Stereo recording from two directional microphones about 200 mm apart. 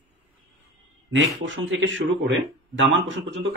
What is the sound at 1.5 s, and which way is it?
Speech, 65° right (ahead or behind).